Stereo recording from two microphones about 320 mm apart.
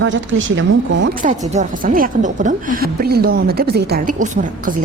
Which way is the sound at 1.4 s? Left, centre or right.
Right.